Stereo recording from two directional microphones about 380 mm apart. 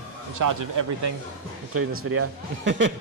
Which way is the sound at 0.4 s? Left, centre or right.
Right.